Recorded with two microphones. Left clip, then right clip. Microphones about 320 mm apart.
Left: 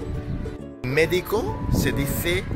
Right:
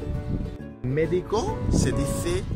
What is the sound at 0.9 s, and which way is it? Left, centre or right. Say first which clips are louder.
Speech: left 4 dB; left.